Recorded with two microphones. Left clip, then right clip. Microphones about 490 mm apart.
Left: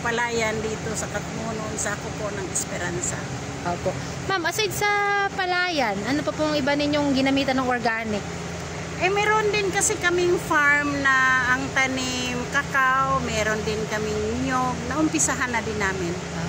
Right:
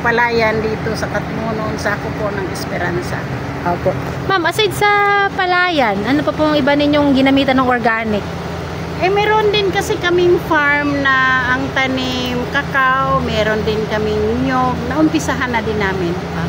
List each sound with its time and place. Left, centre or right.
0.0 s speech: left
4.3 s speech: left
9.0 s speech: left
15.1 s speech: left